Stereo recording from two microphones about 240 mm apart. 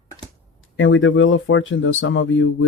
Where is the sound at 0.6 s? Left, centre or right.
Left.